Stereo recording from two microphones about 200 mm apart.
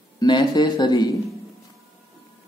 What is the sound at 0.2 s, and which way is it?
Speech, 20° left (ahead or behind).